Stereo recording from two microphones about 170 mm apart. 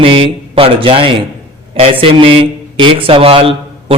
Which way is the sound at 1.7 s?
30° right (ahead or behind).